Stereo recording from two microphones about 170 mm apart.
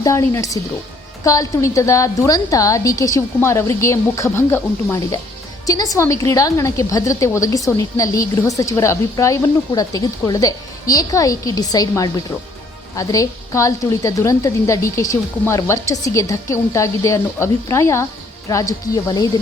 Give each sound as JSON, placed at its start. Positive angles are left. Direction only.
{"t": 0.0, "sound": "a woman's voice", "side_deg": 15}